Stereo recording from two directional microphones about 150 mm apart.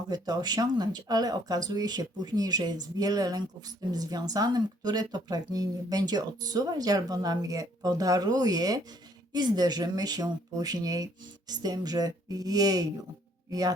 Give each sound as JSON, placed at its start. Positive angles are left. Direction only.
{"t": 0.1, "sound": "speech", "side_deg": -25}